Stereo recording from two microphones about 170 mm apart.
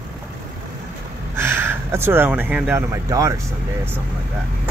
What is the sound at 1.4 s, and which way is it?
Speech, 15° right (ahead or behind).